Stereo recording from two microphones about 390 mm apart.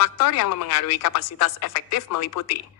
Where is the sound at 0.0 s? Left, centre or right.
Left.